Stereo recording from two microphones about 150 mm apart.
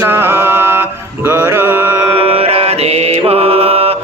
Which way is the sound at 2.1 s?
40° right (ahead or behind).